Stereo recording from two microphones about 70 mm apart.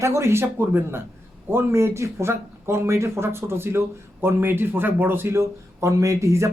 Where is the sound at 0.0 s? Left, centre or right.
Right.